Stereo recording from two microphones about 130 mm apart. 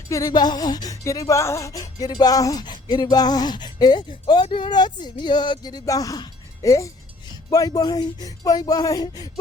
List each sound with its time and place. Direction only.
0.1 s speech: 30° left (ahead or behind)